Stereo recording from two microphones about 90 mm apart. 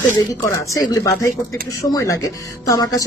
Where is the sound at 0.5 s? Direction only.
40° left (ahead or behind).